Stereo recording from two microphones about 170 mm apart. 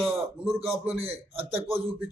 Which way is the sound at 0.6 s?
35° right (ahead or behind).